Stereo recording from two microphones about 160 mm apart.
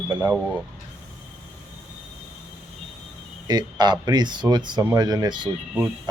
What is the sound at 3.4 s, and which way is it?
Speech, 25° right (ahead or behind).